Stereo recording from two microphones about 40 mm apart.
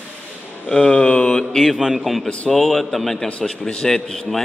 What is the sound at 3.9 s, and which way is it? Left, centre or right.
Speech, centre.